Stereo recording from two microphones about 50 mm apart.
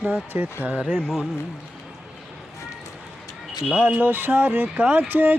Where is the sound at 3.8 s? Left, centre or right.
Right.